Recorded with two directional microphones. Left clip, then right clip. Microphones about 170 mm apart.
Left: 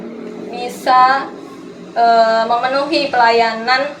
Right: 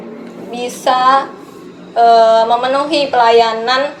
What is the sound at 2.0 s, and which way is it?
A woman's voice, 25° right (ahead or behind).